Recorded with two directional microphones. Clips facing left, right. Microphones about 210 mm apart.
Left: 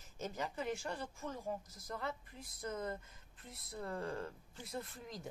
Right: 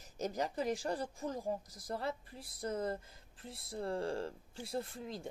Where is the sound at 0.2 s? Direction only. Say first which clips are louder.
Right 5 dB; 40° right (ahead or behind).